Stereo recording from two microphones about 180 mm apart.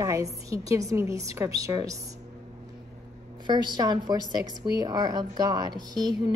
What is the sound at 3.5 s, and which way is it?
A woman's voice, 25° right (ahead or behind).